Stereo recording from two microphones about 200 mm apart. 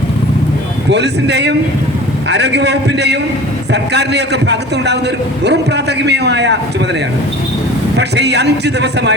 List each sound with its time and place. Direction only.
0.9 s a man's voice: 55° right (ahead or behind)
7.9 s a man's voice: 55° right (ahead or behind)